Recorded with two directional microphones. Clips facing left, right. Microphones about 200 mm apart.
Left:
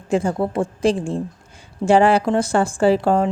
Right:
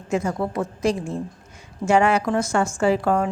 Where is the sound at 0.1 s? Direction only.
30° left (ahead or behind).